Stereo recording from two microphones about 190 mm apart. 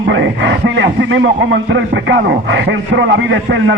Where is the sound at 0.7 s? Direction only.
70° right (ahead or behind).